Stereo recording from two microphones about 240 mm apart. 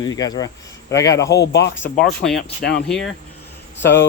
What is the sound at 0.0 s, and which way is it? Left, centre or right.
Speech, centre.